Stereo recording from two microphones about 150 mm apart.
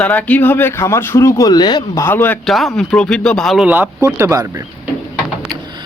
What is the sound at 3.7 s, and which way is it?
Speech, 15° right (ahead or behind).